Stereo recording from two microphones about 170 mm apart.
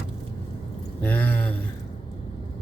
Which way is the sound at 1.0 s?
10° left (ahead or behind).